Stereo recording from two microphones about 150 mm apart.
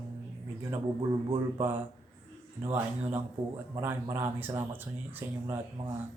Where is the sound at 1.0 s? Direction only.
25° right (ahead or behind).